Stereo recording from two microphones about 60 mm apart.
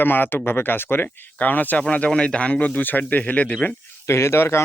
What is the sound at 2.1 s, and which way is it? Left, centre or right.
Speech, centre.